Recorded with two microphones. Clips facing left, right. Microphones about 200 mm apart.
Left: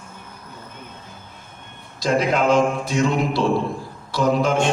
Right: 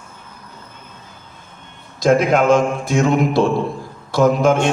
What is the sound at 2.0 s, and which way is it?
A man's voice, 50° right (ahead or behind).